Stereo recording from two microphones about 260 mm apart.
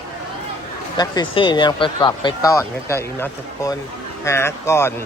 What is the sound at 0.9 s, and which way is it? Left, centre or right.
Speech, centre.